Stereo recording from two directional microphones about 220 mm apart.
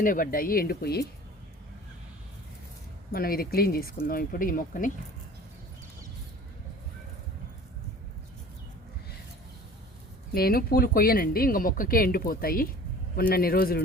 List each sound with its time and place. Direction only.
0.0 s speech: 40° left (ahead or behind)
3.1 s speech: 40° left (ahead or behind)
10.3 s speech: 45° left (ahead or behind)